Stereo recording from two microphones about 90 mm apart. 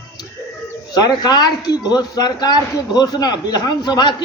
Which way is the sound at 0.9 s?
50° left (ahead or behind).